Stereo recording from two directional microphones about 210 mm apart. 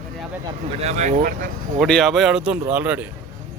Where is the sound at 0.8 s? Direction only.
30° right (ahead or behind).